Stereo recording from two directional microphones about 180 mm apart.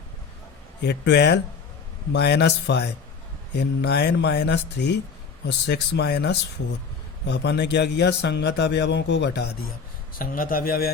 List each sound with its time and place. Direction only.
0.8 s speech: 70° left (ahead or behind)